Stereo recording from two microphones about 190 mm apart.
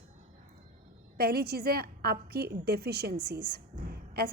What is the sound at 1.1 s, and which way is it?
A woman's voice, 55° right (ahead or behind).